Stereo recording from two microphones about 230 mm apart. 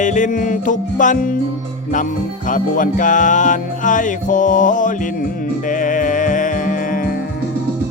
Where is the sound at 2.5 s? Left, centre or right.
Left.